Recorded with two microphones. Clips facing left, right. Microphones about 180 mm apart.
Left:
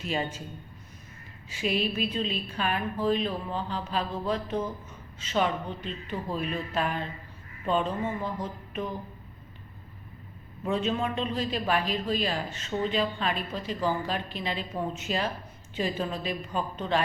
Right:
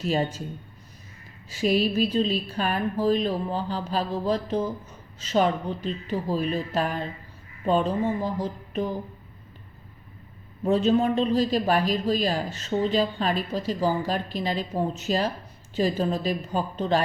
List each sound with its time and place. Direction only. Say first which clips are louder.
0.0 s a man's voice: right 6 dB; 40° right (ahead or behind)
1.5 s a man's voice: right 6 dB; 40° right (ahead or behind)
10.6 s a man's voice: right 7 dB; 35° right (ahead or behind)